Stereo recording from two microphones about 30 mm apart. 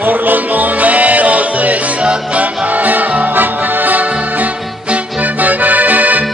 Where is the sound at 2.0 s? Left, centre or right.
Right.